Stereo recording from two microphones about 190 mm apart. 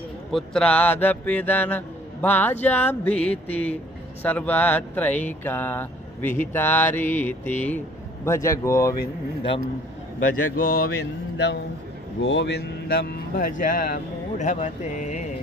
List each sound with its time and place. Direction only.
0.3 s speech: centre (ahead or behind)
10.5 s mantra: 50° left (ahead or behind)
12.2 s speech: 65° left (ahead or behind); by 15.2 s 40° left (ahead or behind)